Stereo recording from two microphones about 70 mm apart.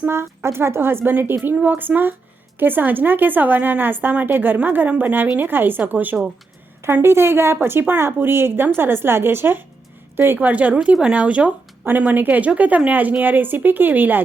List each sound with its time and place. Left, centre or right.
0.1 s speech: right
7.0 s speech: right
10.3 s speech: right